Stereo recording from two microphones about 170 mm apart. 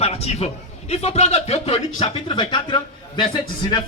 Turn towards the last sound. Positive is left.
turn(degrees=25)  # may be behind; listen again after turning